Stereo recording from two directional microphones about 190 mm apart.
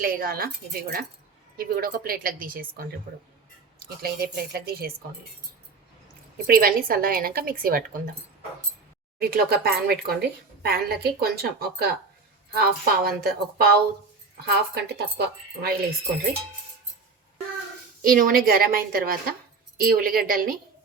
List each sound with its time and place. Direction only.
0.0 s a woman's voice: 50° right (ahead or behind)
3.8 s a woman's voice: 55° right (ahead or behind)
6.3 s a woman's voice: 50° right (ahead or behind)
9.1 s a woman's voice: 55° right (ahead or behind)
18.0 s a woman's voice: 50° right (ahead or behind)